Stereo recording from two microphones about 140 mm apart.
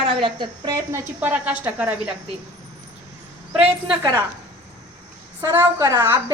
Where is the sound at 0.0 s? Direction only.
40° right (ahead or behind); by 2.0 s 10° right (ahead or behind).